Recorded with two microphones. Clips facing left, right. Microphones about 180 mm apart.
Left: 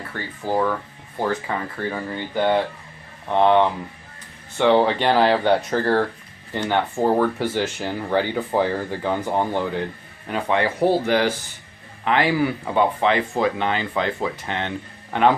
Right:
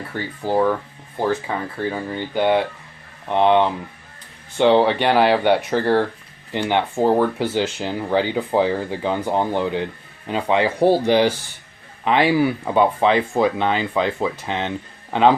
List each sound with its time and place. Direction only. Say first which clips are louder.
0.1 s speech: right 2 dB; 10° right (ahead or behind)